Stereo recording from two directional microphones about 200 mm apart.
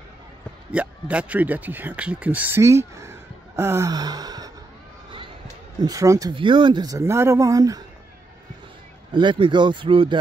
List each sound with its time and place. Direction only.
0.7 s speech: 5° right (ahead or behind)
5.8 s speech: 15° right (ahead or behind)
9.1 s speech: 25° right (ahead or behind)